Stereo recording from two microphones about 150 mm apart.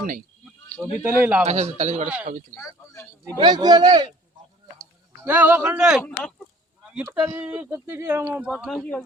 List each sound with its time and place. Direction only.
0.8 s speech: 10° right (ahead or behind)
1.5 s a man's voice: 50° right (ahead or behind)
2.6 s a sound: 20° left (ahead or behind)
3.3 s speech: 30° right (ahead or behind)
5.2 s speech: 10° right (ahead or behind)
8.6 s speech: 5° left (ahead or behind)